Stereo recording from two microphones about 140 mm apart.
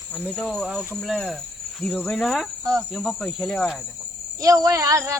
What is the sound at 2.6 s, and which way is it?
Speech, 30° right (ahead or behind).